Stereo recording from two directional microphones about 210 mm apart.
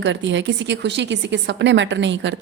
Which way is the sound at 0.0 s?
60° right (ahead or behind).